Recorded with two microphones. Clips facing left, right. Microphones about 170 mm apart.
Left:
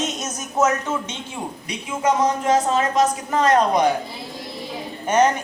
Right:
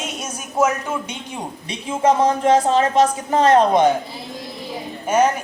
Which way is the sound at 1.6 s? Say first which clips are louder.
Right 4 dB; 30° right (ahead or behind).